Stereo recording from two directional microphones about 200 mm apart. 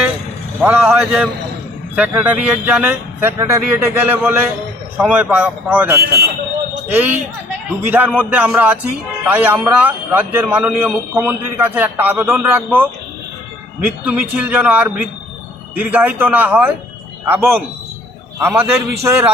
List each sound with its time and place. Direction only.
0.6 s a man's voice: 10° right (ahead or behind)